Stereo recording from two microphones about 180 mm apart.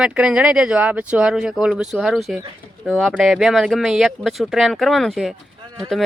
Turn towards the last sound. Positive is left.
turn(degrees=0)  # may be behind; listen again after turning